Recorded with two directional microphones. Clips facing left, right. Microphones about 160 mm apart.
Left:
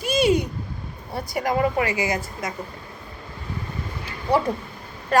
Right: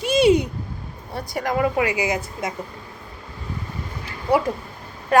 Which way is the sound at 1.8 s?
15° right (ahead or behind).